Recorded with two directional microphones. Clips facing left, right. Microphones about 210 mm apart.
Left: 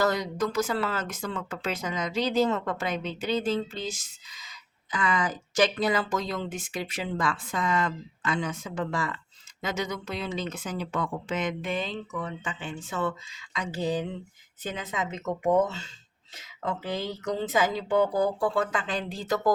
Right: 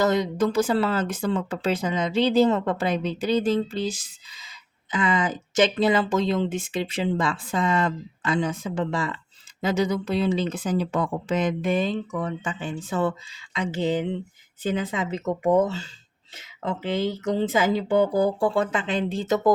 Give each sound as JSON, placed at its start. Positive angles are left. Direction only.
{"t": 0.0, "sound": "speech", "side_deg": -25}